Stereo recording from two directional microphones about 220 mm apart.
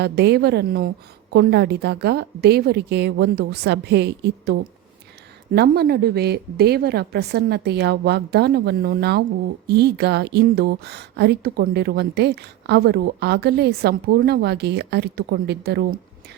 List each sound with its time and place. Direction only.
0.0 s speech: 50° right (ahead or behind)
5.5 s speech: 45° right (ahead or behind)